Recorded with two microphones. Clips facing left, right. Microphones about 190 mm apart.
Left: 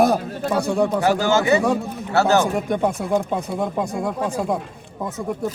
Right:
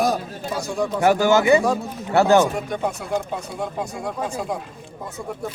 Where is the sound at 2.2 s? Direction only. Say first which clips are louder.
Right 2 dB; 50° left (ahead or behind).